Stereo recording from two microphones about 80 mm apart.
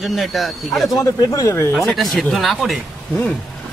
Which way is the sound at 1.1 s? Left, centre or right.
Left.